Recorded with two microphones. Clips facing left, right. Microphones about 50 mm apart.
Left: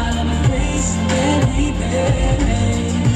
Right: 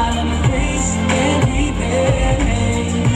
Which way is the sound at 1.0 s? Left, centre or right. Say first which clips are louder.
Right 1 dB; right.